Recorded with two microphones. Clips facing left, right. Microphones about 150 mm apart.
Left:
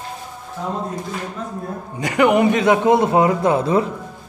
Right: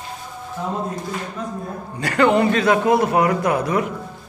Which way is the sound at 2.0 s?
15° left (ahead or behind).